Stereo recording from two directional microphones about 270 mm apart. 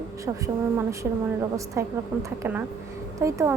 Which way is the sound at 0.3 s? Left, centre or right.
Centre.